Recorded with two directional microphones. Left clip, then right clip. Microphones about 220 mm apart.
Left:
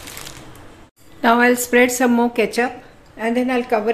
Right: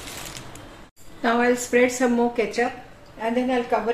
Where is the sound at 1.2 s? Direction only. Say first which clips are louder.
Left 6 dB; 40° left (ahead or behind).